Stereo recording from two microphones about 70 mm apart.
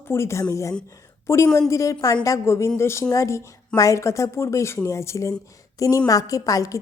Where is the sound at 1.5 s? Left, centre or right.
Left.